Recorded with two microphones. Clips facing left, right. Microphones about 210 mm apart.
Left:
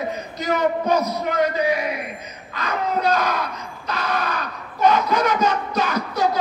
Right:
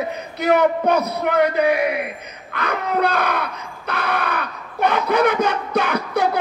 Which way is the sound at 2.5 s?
60° right (ahead or behind).